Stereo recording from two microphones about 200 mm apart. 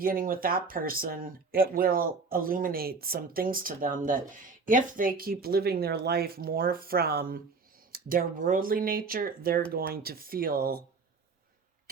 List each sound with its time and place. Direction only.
0.0 s speech: 45° right (ahead or behind)